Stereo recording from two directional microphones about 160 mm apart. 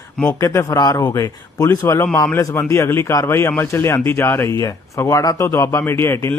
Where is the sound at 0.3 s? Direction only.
20° left (ahead or behind).